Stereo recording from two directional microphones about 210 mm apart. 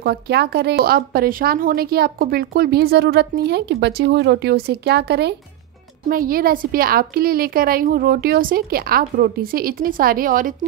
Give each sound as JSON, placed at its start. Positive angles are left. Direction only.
{"t": 0.0, "sound": "speech", "side_deg": -50}